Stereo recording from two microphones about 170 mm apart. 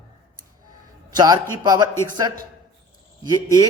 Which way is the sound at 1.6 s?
25° right (ahead or behind).